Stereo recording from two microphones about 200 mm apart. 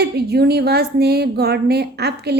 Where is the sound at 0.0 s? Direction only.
55° right (ahead or behind).